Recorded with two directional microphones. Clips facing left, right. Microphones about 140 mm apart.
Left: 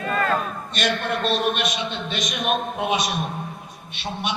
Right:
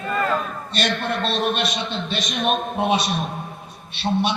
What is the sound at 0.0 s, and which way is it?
Crowd, 5° right (ahead or behind).